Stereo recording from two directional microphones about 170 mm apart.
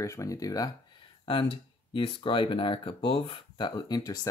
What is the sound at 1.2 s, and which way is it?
Speech, 30° left (ahead or behind).